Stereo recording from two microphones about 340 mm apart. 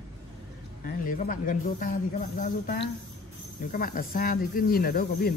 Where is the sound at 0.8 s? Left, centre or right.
Left.